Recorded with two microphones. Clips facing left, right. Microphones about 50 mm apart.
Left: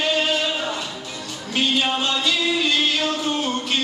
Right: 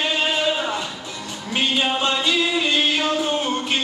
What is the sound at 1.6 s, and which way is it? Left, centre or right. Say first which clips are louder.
Music: even; centre.